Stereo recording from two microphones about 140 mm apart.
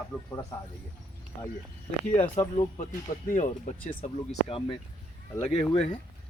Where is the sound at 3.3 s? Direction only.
65° left (ahead or behind).